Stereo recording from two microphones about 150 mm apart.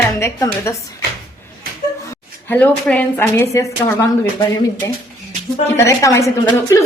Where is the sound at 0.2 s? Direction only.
20° left (ahead or behind).